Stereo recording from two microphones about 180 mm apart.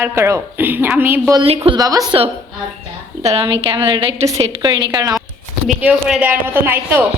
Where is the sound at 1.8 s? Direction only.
20° right (ahead or behind).